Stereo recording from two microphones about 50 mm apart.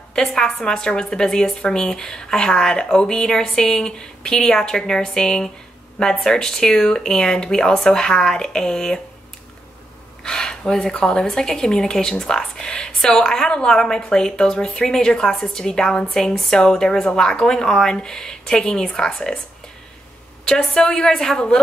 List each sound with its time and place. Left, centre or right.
0.1 s a woman's voice: centre
10.2 s a woman's voice: centre
20.4 s a woman's voice: centre